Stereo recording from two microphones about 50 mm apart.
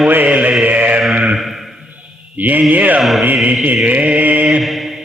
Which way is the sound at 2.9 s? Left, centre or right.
Centre.